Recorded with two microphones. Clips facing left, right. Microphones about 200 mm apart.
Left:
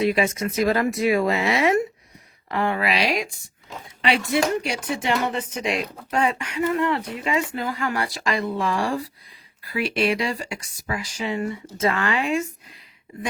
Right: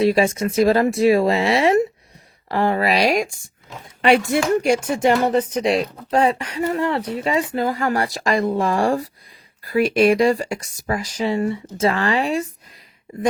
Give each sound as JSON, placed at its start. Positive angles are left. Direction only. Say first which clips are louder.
{"t": 0.0, "sound": "speech", "louder": "right 4 dB", "side_deg": -30}